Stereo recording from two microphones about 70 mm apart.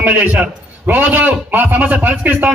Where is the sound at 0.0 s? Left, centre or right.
Right.